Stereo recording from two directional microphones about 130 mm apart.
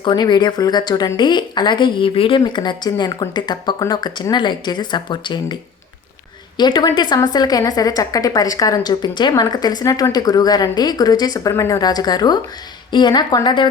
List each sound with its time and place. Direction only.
0.0 s a woman's voice: 35° left (ahead or behind)
6.6 s a woman's voice: 35° left (ahead or behind)